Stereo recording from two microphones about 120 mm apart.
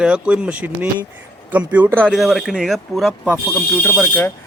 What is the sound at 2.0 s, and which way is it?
Speech, centre (ahead or behind).